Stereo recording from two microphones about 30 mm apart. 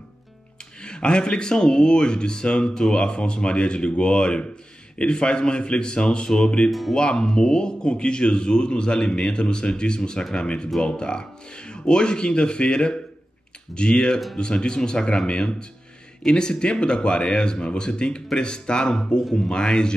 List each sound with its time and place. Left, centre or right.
0.8 s a man's voice: left
13.9 s a man's voice: left
14.3 s a man's voice: left